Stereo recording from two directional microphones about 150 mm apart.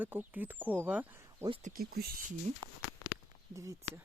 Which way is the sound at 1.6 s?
80° right.